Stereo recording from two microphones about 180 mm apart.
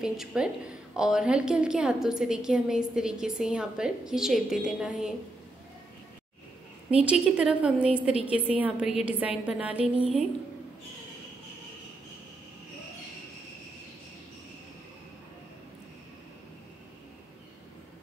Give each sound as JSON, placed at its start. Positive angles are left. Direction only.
{"t": 0.0, "sound": "a woman's voice", "side_deg": -5}
{"t": 6.9, "sound": "a woman's voice", "side_deg": -5}